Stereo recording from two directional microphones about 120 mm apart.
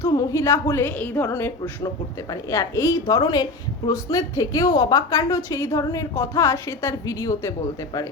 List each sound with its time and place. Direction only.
0.0 s a woman's voice: 30° left (ahead or behind)